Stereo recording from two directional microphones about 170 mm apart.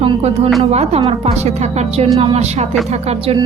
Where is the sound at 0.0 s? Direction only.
35° right (ahead or behind).